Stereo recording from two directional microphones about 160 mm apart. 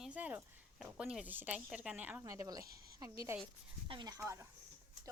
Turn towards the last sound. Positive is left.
turn(degrees=-20)  # may be behind; listen again after turning